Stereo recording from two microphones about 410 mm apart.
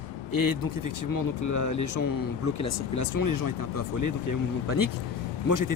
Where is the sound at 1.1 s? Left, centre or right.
Left.